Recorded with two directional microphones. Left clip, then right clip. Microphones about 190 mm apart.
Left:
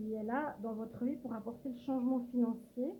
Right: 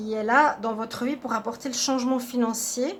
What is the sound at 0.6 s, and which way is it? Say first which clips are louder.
Speech: right 13 dB; 30° right (ahead or behind).